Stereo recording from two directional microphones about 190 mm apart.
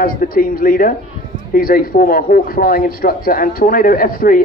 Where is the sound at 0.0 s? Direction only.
50° left (ahead or behind).